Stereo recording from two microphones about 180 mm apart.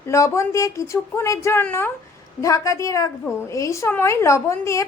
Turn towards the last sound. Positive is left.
turn(degrees=15)  # may be behind; listen again after turning